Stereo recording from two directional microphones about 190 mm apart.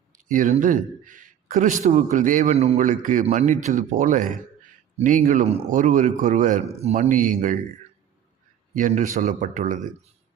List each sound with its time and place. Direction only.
0.1 s a man's voice: 45° right (ahead or behind)
8.7 s speech: 45° right (ahead or behind)